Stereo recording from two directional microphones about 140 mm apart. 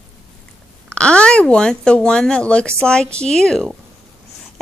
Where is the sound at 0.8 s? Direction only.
5° left (ahead or behind).